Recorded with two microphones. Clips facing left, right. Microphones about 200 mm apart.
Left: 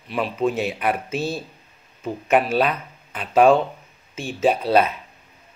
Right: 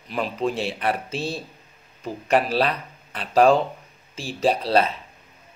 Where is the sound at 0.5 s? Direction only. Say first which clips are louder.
Left 2 dB; 30° right (ahead or behind).